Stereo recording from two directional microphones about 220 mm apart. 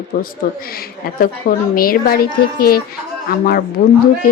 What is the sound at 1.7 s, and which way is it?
Speech, 40° left (ahead or behind).